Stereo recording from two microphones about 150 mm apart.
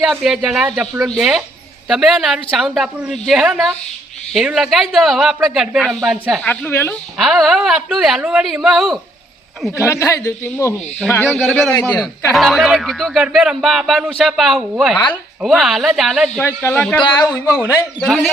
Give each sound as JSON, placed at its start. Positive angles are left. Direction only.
{"t": 0.0, "sound": "speech", "side_deg": 0}
{"t": 6.4, "sound": "speech", "side_deg": 10}
{"t": 7.2, "sound": "speech", "side_deg": 0}
{"t": 9.7, "sound": "a man's voice", "side_deg": 20}
{"t": 11.3, "sound": "speech", "side_deg": 0}
{"t": 11.8, "sound": "speech", "side_deg": 10}
{"t": 17.0, "sound": "a man's voice", "side_deg": 30}
{"t": 18.0, "sound": "speech", "side_deg": 5}